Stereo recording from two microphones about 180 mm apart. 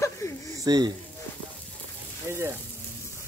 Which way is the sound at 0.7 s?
20° right (ahead or behind).